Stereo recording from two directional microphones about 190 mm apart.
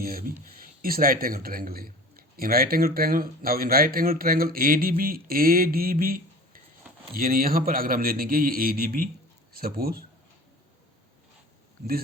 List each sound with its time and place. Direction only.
0.0 s a man's voice: 50° right (ahead or behind)